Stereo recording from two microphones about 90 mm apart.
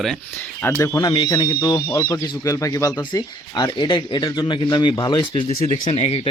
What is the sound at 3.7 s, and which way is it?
Speech, 60° left (ahead or behind).